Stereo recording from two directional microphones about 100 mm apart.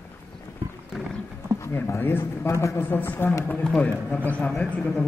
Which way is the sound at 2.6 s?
20° left (ahead or behind).